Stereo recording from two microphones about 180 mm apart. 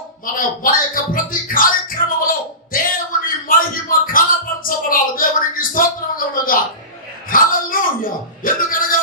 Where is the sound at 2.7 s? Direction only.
50° left (ahead or behind).